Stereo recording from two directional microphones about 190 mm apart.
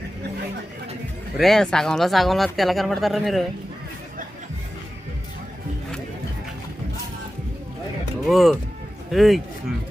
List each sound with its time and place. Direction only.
1.4 s speech: centre (ahead or behind)
8.3 s speech: centre (ahead or behind)